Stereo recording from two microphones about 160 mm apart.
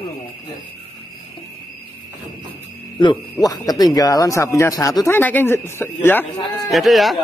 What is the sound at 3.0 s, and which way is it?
Speech, 25° left (ahead or behind).